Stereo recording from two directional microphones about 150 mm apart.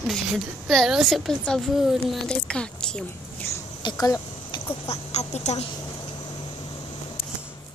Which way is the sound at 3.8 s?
25° left (ahead or behind).